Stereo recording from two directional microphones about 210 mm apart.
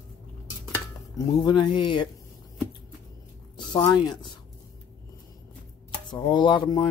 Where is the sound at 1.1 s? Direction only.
20° left (ahead or behind).